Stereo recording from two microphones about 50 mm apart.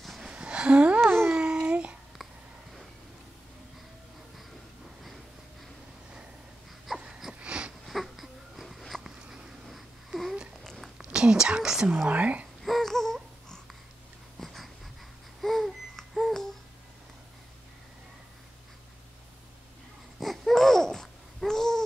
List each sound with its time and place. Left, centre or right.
0.2 s a sound: right
1.0 s a sound: right
1.3 s babbling: centre
7.0 s wail: centre
7.3 s wheeze: right
7.8 s wheeze: centre
9.7 s babbling: centre
10.6 s a sound: centre
11.1 s whispering: centre
12.1 s a sound: right
12.6 s babbling: centre
14.4 s wheeze: centre
15.4 s babbling: centre
20.2 s babbling: centre